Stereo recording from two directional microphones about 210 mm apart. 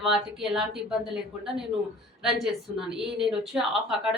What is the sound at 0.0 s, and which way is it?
A woman's voice, centre (ahead or behind).